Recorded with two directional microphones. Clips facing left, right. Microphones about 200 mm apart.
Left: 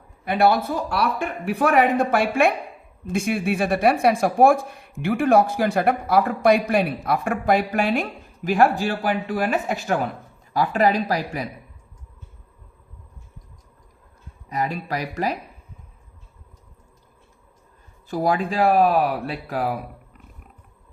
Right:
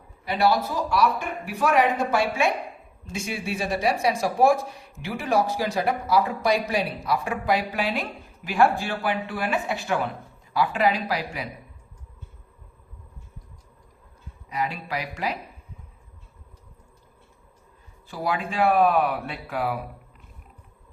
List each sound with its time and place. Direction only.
0.3 s speech: 55° left (ahead or behind)
14.5 s speech: 45° left (ahead or behind)
18.1 s speech: 40° left (ahead or behind)